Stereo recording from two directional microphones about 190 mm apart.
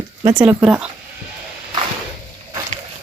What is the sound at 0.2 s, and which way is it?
Speech, 20° right (ahead or behind).